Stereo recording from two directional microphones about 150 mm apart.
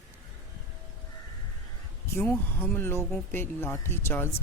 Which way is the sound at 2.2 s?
15° left (ahead or behind).